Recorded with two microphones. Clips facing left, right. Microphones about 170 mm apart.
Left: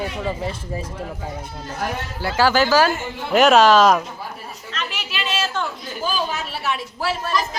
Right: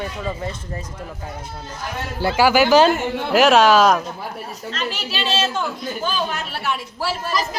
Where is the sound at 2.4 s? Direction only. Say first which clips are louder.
Right 2 dB; 10° right (ahead or behind).